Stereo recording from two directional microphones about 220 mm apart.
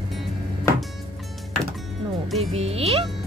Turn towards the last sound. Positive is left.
turn(degrees=-25)  # may be behind; listen again after turning